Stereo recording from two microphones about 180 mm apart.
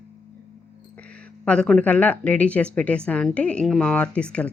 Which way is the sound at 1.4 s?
5° left (ahead or behind).